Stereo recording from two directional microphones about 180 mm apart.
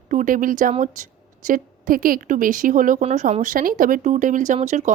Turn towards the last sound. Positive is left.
turn(degrees=-40)  # may be behind; listen again after turning